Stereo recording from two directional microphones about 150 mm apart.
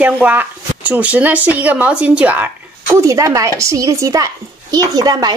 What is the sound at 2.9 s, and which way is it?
A woman's voice, 20° right (ahead or behind).